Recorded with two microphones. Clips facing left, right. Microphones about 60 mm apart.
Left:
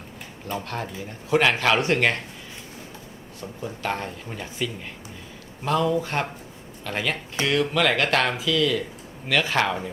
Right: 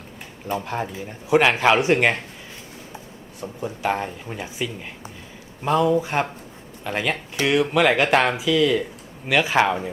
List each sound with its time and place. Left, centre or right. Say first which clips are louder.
0.4 s speech: right 4 dB; centre
3.4 s speech: right 4 dB; centre